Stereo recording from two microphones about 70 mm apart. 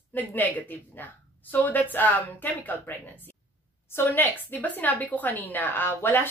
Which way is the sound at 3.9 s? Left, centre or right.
Left.